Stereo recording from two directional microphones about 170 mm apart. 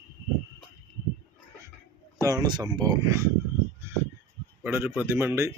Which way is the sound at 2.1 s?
20° right (ahead or behind).